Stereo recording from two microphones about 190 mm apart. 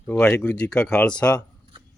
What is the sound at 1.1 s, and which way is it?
Speech, 20° left (ahead or behind).